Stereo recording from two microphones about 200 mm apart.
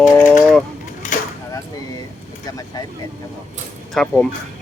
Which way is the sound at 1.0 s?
40° left (ahead or behind).